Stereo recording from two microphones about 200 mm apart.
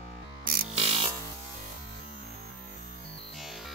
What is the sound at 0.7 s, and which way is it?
Music, 30° right (ahead or behind).